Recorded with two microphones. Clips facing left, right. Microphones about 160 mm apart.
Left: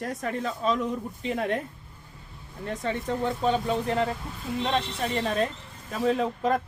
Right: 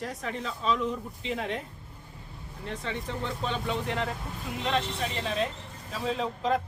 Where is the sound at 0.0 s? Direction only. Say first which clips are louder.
Left 4 dB; 50° left (ahead or behind).